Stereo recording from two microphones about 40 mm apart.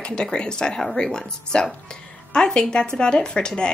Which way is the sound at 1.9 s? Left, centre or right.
Left.